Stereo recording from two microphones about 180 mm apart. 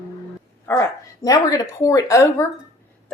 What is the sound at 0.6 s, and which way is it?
Speech, 15° left (ahead or behind).